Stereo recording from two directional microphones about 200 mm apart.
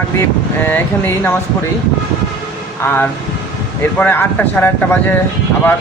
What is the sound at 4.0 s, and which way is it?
Speech, 10° left (ahead or behind).